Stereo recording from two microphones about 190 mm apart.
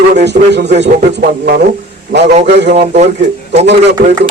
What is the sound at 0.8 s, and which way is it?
Speech, 50° right (ahead or behind).